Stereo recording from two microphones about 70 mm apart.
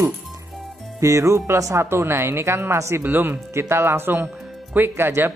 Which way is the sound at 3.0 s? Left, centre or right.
Right.